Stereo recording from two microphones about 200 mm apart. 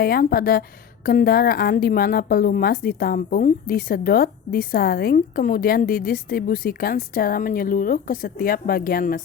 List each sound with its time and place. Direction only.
0.0 s a woman's voice: 50° left (ahead or behind)